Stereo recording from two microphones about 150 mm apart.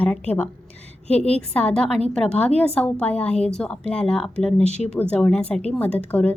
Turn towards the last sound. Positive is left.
turn(degrees=10)  # may be behind; listen again after turning